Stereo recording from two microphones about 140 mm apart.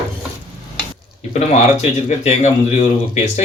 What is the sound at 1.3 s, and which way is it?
Speech, 50° left (ahead or behind).